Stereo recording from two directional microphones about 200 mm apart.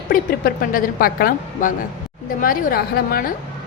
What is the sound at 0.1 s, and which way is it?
A woman's voice, 45° left (ahead or behind).